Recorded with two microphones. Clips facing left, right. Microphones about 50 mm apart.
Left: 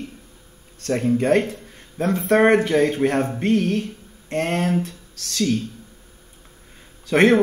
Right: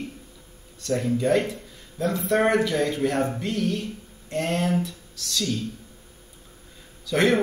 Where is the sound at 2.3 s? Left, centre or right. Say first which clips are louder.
Left 6 dB; left.